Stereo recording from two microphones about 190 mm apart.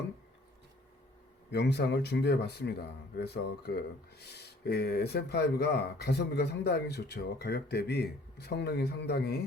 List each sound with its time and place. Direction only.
1.5 s speech: 65° left (ahead or behind)